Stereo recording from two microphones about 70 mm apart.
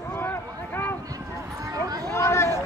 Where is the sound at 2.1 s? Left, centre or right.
Left.